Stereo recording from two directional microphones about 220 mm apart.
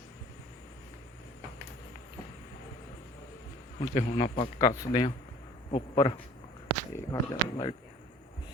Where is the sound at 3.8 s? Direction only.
25° left (ahead or behind).